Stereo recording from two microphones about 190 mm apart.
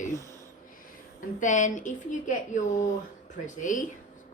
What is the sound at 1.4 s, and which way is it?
Speech, 40° left (ahead or behind).